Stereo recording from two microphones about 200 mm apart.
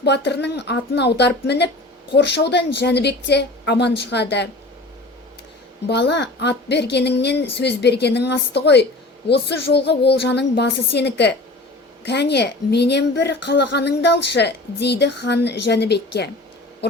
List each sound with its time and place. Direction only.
0.0 s a woman's voice: 55° left (ahead or behind)
5.9 s a woman's voice: 60° left (ahead or behind)